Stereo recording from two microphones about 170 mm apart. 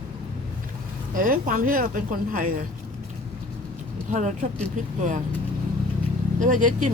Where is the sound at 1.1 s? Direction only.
55° right (ahead or behind).